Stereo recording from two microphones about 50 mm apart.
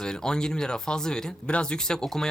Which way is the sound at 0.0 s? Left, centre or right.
Centre.